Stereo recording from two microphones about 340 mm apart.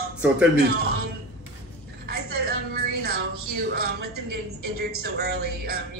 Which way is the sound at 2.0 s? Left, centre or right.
Right.